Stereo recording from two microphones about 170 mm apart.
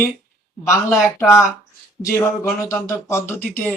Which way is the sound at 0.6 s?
15° left (ahead or behind).